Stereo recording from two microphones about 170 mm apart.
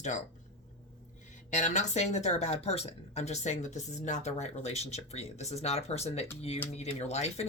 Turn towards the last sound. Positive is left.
turn(degrees=40)  # may be behind; listen again after turning